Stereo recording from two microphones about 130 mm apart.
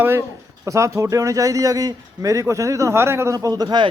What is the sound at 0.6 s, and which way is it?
A man's voice, 25° right (ahead or behind).